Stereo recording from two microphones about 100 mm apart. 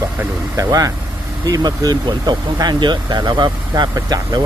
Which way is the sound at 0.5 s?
35° right (ahead or behind).